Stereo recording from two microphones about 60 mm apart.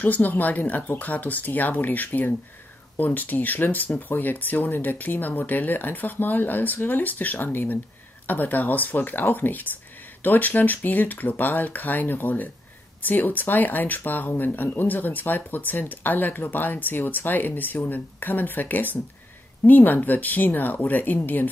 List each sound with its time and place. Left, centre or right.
0.0 s speech: left